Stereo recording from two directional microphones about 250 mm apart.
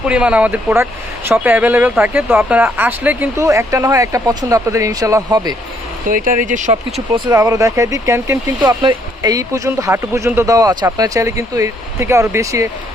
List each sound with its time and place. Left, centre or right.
0.0 s speech: centre
6.1 s speech: right
7.3 s speech: centre